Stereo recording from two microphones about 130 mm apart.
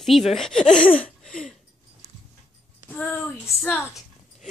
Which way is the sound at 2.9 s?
10° left (ahead or behind).